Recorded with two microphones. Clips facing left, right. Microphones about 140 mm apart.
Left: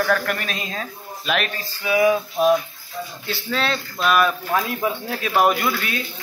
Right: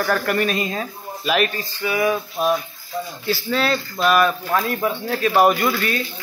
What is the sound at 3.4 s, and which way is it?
A man's voice, 5° right (ahead or behind).